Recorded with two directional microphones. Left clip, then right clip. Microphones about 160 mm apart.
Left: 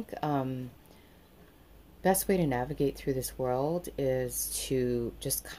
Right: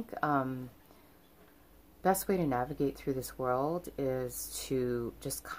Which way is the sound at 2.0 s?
5° right (ahead or behind).